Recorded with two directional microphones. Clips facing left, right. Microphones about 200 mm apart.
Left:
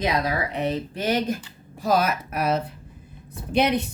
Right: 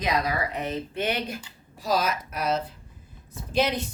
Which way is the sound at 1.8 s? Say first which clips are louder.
Left 4 dB; 55° left (ahead or behind).